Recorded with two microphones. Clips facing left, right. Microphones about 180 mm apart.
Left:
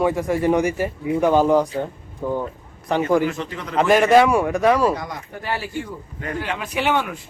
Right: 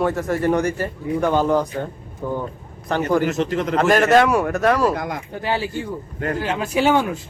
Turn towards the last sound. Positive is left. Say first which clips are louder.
# right 4 dB
turn(degrees=-35)  # may be behind; listen again after turning